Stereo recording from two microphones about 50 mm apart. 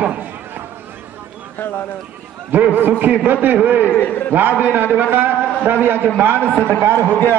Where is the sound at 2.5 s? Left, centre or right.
Right.